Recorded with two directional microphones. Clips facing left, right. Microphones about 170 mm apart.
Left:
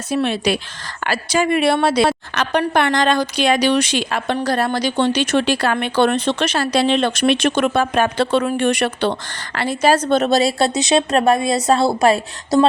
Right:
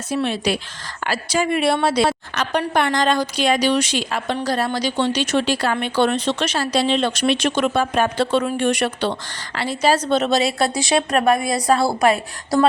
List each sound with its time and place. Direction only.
0.1 s a woman's voice: 65° left (ahead or behind); by 10.7 s 35° left (ahead or behind)
10.8 s speech: 25° left (ahead or behind)